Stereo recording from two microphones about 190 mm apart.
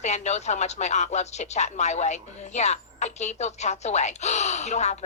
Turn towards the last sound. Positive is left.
turn(degrees=35)  # may be behind; listen again after turning